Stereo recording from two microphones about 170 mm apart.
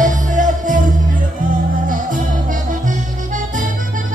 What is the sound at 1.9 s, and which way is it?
Music, 50° right (ahead or behind).